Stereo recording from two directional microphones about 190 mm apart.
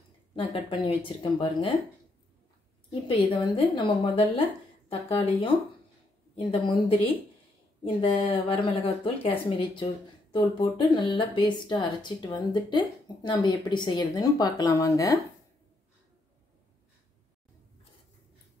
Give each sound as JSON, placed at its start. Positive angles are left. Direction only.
{"t": 0.4, "sound": "speech", "side_deg": 25}
{"t": 2.9, "sound": "speech", "side_deg": 25}
{"t": 10.3, "sound": "speech", "side_deg": 25}